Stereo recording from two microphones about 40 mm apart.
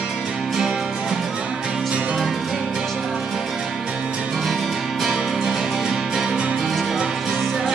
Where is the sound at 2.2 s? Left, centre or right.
Centre.